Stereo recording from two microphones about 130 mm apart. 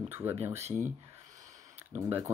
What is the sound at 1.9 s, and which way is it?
Speech, 20° right (ahead or behind).